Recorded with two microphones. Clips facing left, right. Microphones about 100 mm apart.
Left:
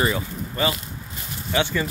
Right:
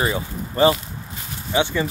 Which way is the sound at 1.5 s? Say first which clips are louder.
Right 2 dB; 15° right (ahead or behind).